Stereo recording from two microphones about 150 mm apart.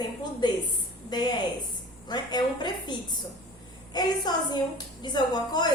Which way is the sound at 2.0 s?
30° left (ahead or behind).